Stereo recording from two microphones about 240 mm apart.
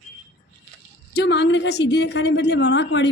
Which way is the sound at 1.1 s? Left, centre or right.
Left.